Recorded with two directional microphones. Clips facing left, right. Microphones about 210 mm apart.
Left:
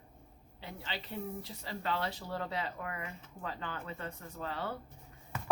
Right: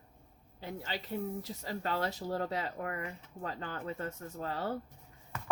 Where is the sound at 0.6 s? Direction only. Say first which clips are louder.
Right 3 dB; 45° right (ahead or behind).